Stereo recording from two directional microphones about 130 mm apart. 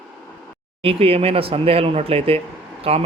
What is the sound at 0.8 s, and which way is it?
Speech, 50° right (ahead or behind).